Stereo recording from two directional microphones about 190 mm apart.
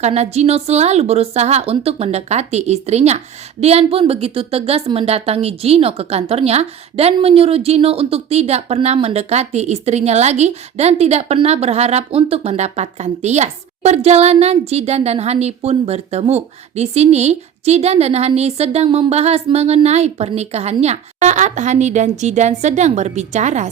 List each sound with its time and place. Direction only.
0.0 s a woman's voice: 35° right (ahead or behind)